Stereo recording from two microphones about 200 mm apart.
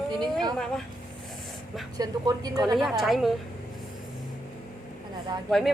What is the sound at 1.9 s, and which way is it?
Speech, 20° right (ahead or behind).